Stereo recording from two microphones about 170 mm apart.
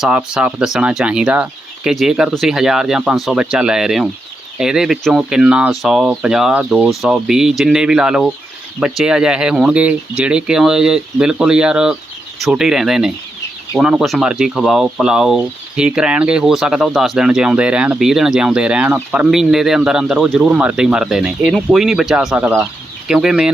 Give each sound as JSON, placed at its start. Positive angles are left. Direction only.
{"t": 0.0, "sound": "speech", "side_deg": -5}